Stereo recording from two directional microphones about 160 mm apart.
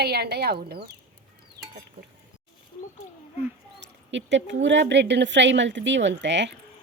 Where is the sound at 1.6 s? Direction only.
80° right.